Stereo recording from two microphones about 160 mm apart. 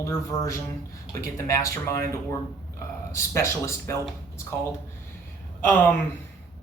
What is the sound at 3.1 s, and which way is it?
Speech, 20° left (ahead or behind).